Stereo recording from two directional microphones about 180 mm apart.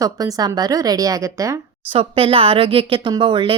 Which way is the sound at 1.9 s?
30° right (ahead or behind).